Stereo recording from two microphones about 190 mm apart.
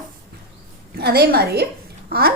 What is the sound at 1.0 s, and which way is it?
A woman's voice, 55° right (ahead or behind).